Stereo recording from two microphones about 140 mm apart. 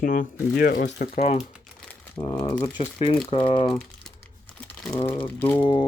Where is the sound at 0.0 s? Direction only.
75° left (ahead or behind).